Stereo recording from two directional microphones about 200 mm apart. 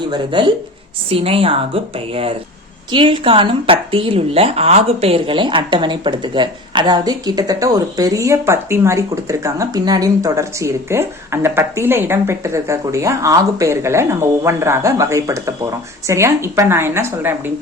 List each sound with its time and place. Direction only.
0.0 s a woman's voice: 25° right (ahead or behind)